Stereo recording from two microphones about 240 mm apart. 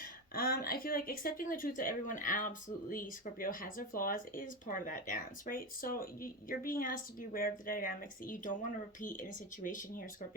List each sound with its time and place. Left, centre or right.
0.0 s speech: left